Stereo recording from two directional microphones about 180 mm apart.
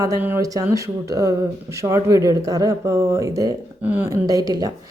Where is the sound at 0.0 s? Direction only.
15° right (ahead or behind).